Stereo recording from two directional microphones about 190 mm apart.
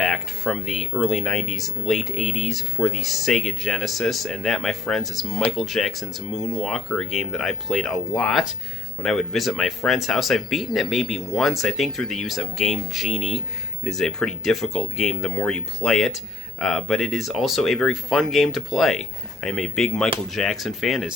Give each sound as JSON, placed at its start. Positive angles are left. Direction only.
{"t": 0.0, "sound": "speech", "side_deg": 0}